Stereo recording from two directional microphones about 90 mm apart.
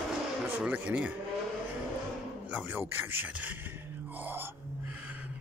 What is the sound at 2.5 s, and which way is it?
Speech, 25° right (ahead or behind).